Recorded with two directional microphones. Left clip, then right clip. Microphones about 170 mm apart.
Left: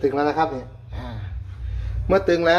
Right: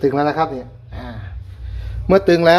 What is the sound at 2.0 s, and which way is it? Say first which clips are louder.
Speech: right 6 dB; 55° right (ahead or behind).